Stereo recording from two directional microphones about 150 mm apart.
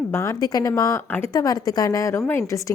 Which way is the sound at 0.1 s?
20° left (ahead or behind).